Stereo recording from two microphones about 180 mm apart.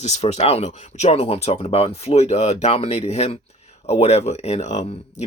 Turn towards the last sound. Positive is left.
turn(degrees=35)  # may be behind; listen again after turning